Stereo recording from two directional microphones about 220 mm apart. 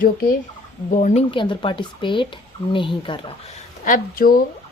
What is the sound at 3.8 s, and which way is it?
Speech, 40° left (ahead or behind).